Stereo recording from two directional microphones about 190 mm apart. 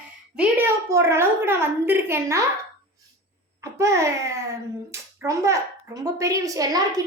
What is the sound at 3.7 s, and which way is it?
A woman's voice, 15° right (ahead or behind).